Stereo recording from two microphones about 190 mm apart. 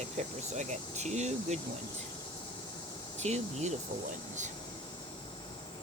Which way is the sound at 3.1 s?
35° right (ahead or behind).